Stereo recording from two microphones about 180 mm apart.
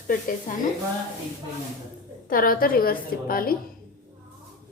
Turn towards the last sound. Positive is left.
turn(degrees=55)  # may be behind; listen again after turning